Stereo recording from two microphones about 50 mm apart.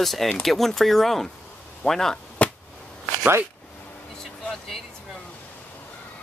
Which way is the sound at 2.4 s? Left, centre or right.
Left.